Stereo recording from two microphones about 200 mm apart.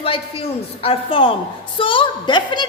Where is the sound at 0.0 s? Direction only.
30° left (ahead or behind).